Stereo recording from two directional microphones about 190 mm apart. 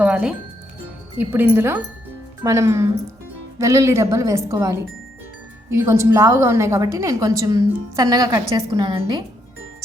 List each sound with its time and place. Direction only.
0.0 s music: 5° right (ahead or behind)
1.2 s a woman's voice: 10° right (ahead or behind)